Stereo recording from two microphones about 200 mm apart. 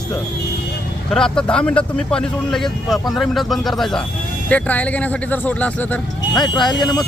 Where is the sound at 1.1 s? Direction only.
5° left (ahead or behind).